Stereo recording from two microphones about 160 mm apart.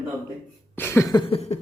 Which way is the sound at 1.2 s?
40° left (ahead or behind).